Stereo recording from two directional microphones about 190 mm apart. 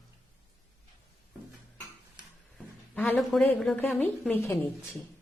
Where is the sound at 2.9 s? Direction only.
10° left (ahead or behind).